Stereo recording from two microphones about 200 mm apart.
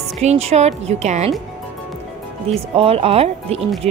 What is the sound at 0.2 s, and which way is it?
Speech, 35° right (ahead or behind).